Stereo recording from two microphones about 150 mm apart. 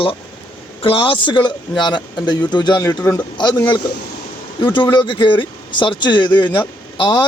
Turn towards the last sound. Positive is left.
turn(degrees=35)  # may be behind; listen again after turning